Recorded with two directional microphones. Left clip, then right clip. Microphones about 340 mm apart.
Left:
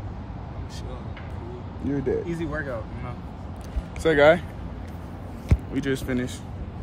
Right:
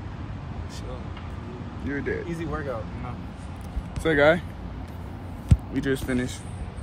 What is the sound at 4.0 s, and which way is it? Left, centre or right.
Speech, centre.